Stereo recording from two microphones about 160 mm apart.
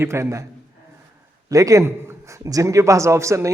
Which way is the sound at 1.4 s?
20° right (ahead or behind).